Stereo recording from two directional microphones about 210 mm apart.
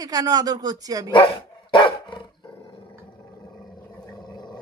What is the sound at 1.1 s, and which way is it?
Dog, 25° left (ahead or behind).